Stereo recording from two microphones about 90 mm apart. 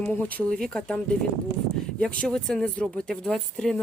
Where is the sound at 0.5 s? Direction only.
10° left (ahead or behind).